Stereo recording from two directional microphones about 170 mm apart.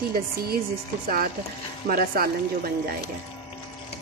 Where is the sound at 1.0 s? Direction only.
55° right (ahead or behind).